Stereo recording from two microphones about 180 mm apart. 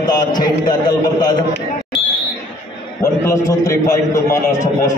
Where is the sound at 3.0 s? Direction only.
15° left (ahead or behind).